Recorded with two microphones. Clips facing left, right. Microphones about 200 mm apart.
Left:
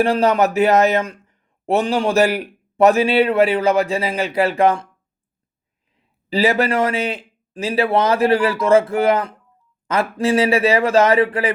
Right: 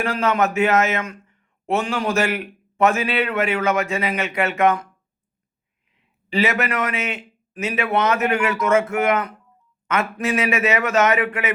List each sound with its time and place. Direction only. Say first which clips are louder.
0.0 s a man's voice: left 5 dB; 35° left (ahead or behind)
6.0 s a man's voice: left 3 dB; 35° left (ahead or behind)